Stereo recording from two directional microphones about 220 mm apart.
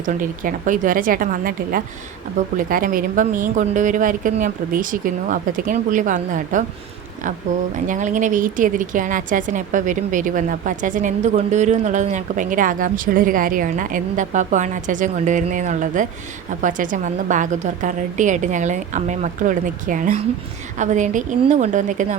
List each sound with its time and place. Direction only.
0.0 s a woman's voice: 35° right (ahead or behind)
7.9 s a woman's voice: 35° right (ahead or behind)